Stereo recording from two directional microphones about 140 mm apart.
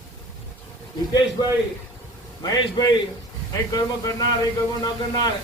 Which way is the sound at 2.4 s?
25° left (ahead or behind).